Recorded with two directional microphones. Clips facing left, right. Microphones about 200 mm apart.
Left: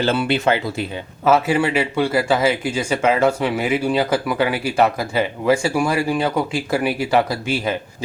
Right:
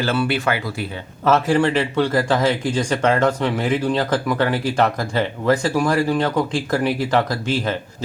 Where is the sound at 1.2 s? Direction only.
5° left (ahead or behind).